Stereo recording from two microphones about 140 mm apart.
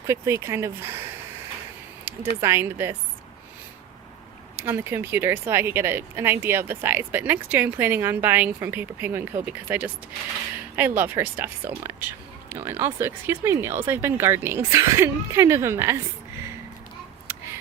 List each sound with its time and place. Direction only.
0.1 s speech: 20° right (ahead or behind)
2.4 s speech: 20° right (ahead or behind)
4.5 s speech: 15° right (ahead or behind)
17.3 s tick: 15° right (ahead or behind)